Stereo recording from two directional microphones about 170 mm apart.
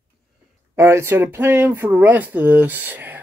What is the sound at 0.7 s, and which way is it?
Speech, 15° right (ahead or behind).